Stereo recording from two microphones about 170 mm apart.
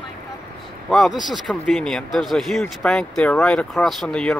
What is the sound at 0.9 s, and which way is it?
Speech, centre (ahead or behind).